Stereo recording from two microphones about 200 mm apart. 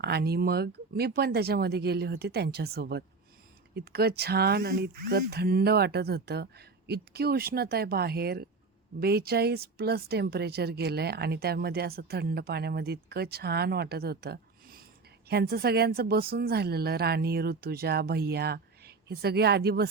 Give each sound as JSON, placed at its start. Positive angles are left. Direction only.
{"t": 0.0, "sound": "speech", "side_deg": -55}